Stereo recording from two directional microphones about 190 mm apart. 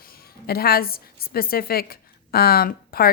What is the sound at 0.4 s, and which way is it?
A woman's voice, 55° left (ahead or behind).